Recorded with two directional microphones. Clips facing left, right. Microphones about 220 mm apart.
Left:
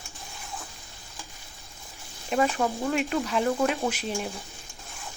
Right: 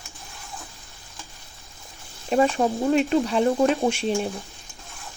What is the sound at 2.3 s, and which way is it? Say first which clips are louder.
Speech: right 5 dB; 30° right (ahead or behind).